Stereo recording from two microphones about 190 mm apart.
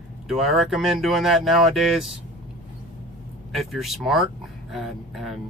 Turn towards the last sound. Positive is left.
turn(degrees=0)  # may be behind; listen again after turning